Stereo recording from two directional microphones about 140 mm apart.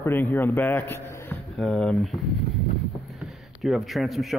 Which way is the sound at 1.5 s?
5° left (ahead or behind).